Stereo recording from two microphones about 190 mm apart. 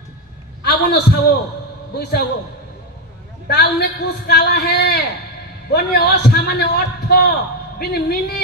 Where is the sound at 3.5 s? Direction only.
55° left (ahead or behind).